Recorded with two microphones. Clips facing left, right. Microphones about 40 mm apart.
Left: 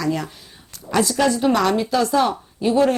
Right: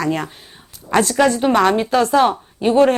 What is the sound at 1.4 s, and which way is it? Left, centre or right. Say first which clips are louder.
A woman's voice: right 3 dB; right.